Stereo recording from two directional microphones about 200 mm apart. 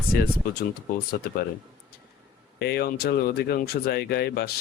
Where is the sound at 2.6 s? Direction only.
50° left (ahead or behind).